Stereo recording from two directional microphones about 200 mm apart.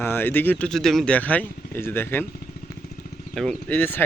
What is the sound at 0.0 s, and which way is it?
Speech, 10° left (ahead or behind).